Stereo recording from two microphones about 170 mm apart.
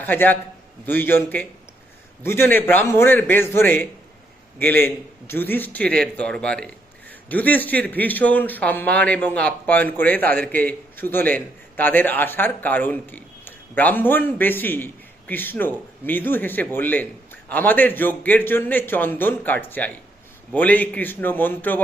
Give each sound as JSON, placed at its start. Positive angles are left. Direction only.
{"t": 0.0, "sound": "a man's voice", "side_deg": 10}